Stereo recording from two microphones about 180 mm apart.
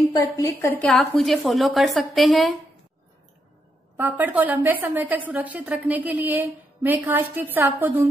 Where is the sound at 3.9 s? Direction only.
10° right (ahead or behind).